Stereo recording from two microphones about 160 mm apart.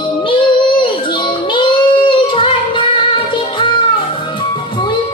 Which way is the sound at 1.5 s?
30° left (ahead or behind).